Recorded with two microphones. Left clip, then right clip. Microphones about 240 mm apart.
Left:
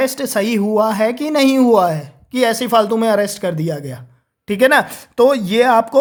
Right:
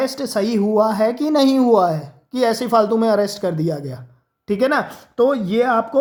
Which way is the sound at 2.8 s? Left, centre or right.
Left.